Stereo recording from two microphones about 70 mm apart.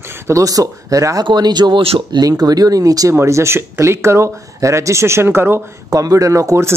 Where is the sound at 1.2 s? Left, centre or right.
Right.